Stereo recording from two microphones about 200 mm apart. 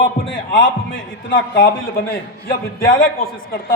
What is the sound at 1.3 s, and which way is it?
Speech, 55° left (ahead or behind).